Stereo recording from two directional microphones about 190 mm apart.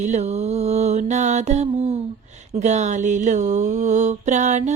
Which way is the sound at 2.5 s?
40° right (ahead or behind).